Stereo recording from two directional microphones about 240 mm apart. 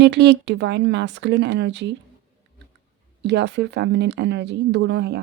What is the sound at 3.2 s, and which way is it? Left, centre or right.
Speech, right.